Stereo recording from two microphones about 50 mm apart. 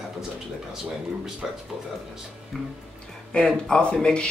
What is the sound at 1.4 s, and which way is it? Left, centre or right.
Speech, centre.